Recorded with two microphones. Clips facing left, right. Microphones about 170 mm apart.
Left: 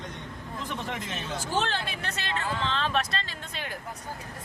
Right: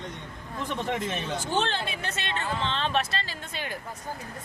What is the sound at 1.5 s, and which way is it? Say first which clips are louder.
Speech: even; 5° left (ahead or behind).